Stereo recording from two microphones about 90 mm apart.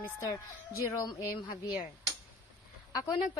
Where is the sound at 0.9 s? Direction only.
35° left (ahead or behind).